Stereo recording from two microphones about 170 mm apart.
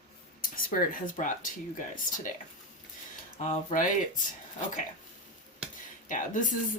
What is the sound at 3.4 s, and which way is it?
Speech, 50° left (ahead or behind).